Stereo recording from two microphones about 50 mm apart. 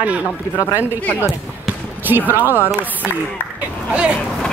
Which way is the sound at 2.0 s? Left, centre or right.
Right.